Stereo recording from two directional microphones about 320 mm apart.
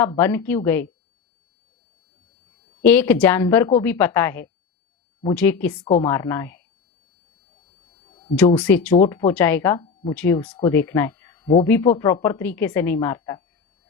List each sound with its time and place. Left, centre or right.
0.0 s speech: centre
2.8 s speech: centre
8.0 s a sound: centre
8.4 s speech: centre